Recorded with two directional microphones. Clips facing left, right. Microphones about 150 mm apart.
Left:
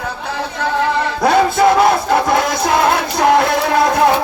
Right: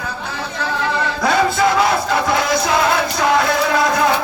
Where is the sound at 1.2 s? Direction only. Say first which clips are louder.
Left 4 dB; 55° left (ahead or behind).